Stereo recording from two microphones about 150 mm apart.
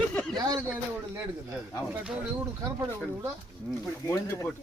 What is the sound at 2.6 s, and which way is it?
Speech, 20° right (ahead or behind).